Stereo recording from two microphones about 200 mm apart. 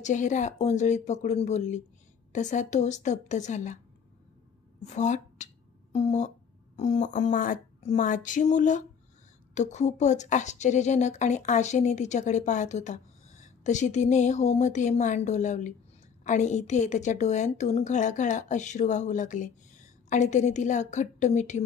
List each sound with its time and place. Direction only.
0.0 s a woman's voice: 40° left (ahead or behind)
4.8 s a woman's voice: 35° left (ahead or behind)